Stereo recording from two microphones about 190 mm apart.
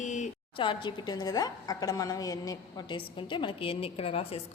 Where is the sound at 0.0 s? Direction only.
40° left (ahead or behind).